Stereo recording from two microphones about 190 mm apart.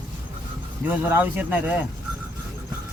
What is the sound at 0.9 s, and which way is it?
Speech, 10° right (ahead or behind).